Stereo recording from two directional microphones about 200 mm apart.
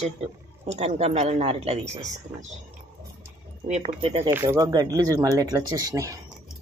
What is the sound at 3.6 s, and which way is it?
Speech, 35° right (ahead or behind).